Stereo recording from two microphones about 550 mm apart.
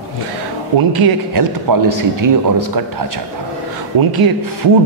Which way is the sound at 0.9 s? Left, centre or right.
Right.